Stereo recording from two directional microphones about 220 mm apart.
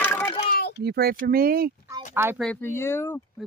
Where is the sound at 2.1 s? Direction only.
10° right (ahead or behind).